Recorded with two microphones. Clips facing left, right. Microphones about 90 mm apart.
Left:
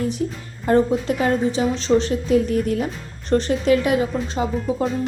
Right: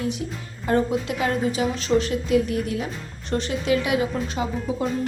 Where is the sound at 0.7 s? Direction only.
40° left (ahead or behind).